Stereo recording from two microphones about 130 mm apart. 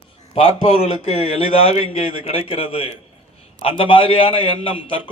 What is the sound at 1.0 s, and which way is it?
A man's voice, 50° left (ahead or behind).